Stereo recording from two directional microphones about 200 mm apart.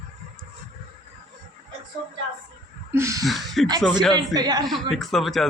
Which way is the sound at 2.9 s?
15° right (ahead or behind).